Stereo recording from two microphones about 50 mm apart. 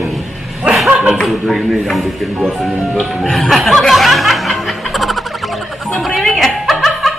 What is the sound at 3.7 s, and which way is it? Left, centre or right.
Music, centre.